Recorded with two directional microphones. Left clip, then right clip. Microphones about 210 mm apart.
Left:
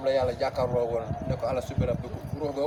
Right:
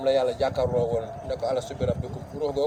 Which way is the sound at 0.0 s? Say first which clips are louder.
Right 3 dB; 45° right (ahead or behind).